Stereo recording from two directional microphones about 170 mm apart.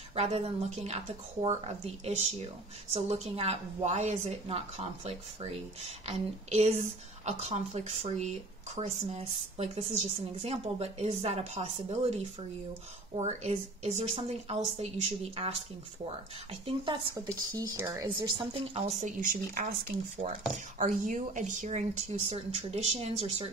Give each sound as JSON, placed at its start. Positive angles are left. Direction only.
{"t": 0.1, "sound": "speech", "side_deg": -40}
{"t": 2.9, "sound": "speech", "side_deg": -35}
{"t": 13.1, "sound": "speech", "side_deg": -40}
{"t": 16.6, "sound": "speech", "side_deg": -30}
{"t": 18.4, "sound": "a woman's voice", "side_deg": -35}
{"t": 20.2, "sound": "speech", "side_deg": -45}